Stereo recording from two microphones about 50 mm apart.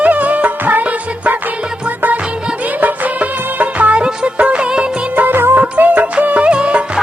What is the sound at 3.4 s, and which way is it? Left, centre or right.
Music of bollywood, right.